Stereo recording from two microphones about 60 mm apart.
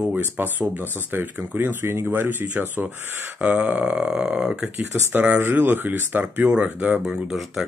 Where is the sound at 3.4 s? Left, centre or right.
Right.